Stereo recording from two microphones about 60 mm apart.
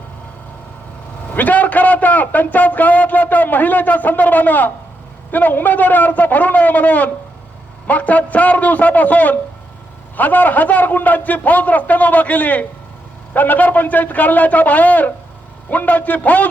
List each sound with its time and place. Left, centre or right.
1.3 s a man's voice: left